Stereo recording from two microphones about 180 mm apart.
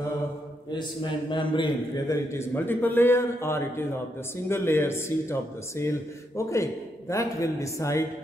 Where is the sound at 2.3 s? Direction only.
15° left (ahead or behind).